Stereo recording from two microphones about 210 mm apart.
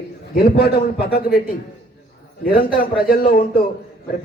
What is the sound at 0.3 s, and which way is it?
Speech, 50° left (ahead or behind).